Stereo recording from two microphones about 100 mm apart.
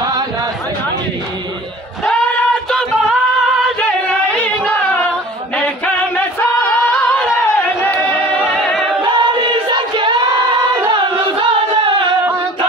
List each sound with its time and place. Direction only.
3.8 s a sound: 15° left (ahead or behind)
5.6 s singing: 15° left (ahead or behind)
9.0 s choir: 50° right (ahead or behind)
10.9 s music: 55° right (ahead or behind)